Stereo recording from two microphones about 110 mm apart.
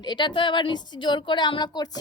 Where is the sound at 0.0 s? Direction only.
45° left (ahead or behind).